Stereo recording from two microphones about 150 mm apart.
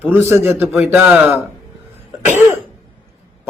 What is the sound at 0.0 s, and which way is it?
Speech, 15° right (ahead or behind).